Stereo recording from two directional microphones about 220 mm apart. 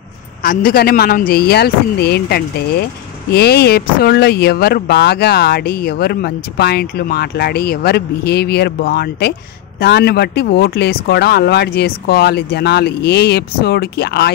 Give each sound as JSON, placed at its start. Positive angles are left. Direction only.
{"t": 0.4, "sound": "speech", "side_deg": 40}